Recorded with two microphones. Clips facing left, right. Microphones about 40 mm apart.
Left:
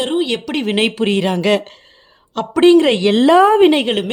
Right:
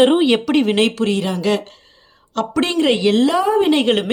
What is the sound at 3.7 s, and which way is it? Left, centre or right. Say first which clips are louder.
Speech: even; centre.